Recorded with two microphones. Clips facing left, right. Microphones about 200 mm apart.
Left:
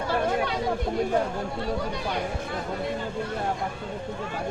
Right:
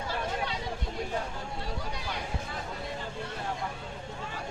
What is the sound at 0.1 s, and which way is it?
Chatter, 60° left (ahead or behind).